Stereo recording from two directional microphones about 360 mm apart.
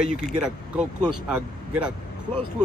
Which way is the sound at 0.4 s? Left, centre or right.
Centre.